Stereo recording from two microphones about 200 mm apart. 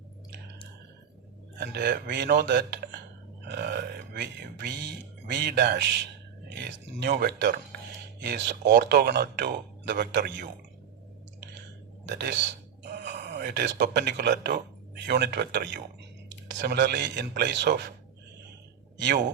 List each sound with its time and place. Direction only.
1.5 s a man's voice: 55° right (ahead or behind)
12.0 s speech: 60° right (ahead or behind)
19.0 s a man's voice: 55° right (ahead or behind)